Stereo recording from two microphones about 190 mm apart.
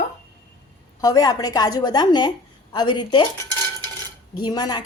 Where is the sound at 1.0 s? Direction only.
20° left (ahead or behind).